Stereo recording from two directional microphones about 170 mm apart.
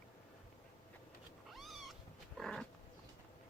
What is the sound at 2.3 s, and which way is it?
Livestock, centre (ahead or behind).